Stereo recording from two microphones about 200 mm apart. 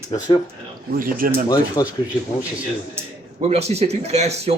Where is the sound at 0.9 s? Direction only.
45° right (ahead or behind).